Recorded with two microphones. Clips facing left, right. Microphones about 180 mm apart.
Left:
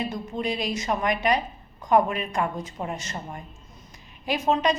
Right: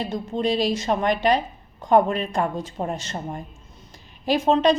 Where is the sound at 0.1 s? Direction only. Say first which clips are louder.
Right 5 dB; 30° right (ahead or behind).